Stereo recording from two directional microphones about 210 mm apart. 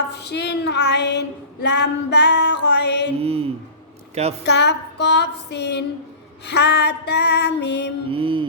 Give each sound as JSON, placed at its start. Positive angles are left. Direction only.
{"t": 0.1, "sound": "child singing", "side_deg": 55}
{"t": 1.6, "sound": "female singing", "side_deg": 50}
{"t": 3.2, "sound": "a sound", "side_deg": -30}
{"t": 4.1, "sound": "a woman's voice", "side_deg": -30}
{"t": 4.4, "sound": "child singing", "side_deg": 55}
{"t": 6.5, "sound": "female singing", "side_deg": 55}
{"t": 8.1, "sound": "mantra", "side_deg": -25}